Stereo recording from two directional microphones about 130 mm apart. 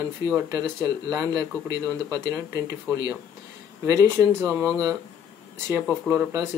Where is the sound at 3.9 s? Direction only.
25° right (ahead or behind).